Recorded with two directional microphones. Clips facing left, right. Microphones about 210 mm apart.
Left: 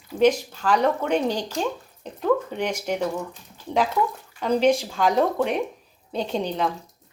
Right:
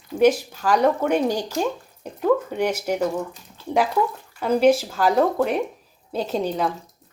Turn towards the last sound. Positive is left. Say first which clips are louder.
# right 2 dB
turn(degrees=-5)  # may be behind; listen again after turning